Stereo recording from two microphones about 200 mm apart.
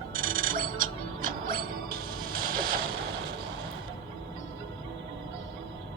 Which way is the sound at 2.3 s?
45° right (ahead or behind).